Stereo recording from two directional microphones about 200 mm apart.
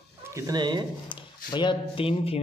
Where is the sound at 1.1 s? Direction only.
25° left (ahead or behind).